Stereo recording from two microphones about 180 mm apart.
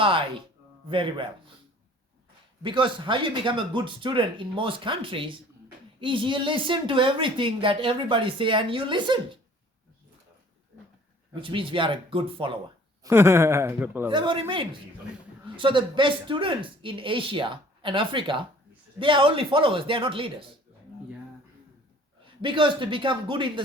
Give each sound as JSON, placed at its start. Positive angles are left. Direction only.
{"t": 0.0, "sound": "speech", "side_deg": -30}
{"t": 2.6, "sound": "speech", "side_deg": -25}
{"t": 11.3, "sound": "speech", "side_deg": -30}
{"t": 13.0, "sound": "speech", "side_deg": -15}
{"t": 14.1, "sound": "speech", "side_deg": -25}
{"t": 22.2, "sound": "speech", "side_deg": -30}